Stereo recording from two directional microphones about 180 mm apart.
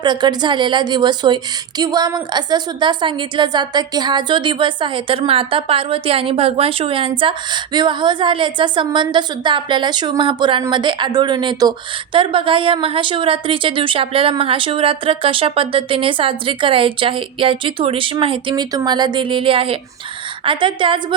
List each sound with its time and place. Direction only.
0.0 s a woman's voice: 25° right (ahead or behind)